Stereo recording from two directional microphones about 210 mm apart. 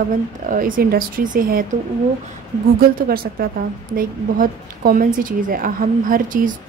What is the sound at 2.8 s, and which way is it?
A woman's voice, 45° right (ahead or behind).